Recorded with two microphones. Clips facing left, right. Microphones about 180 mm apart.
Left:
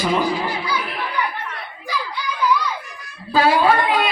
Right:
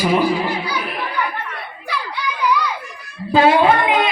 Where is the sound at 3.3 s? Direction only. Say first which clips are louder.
Right 3 dB; 20° right (ahead or behind).